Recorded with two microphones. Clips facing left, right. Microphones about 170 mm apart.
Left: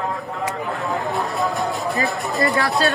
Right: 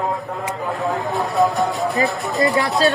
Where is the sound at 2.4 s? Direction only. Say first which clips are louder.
Right 2 dB; 20° right (ahead or behind).